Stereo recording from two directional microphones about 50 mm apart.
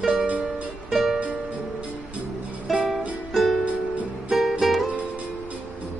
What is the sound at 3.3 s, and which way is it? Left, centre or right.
Music, centre.